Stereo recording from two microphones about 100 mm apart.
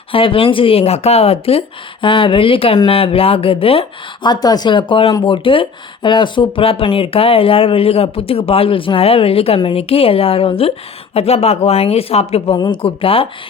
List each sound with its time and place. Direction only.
0.1 s speech: 60° left (ahead or behind)
4.2 s a woman's voice: 45° left (ahead or behind); by 12.5 s 80° left
12.5 s speech: 50° left (ahead or behind)
12.8 s speech: 65° left (ahead or behind)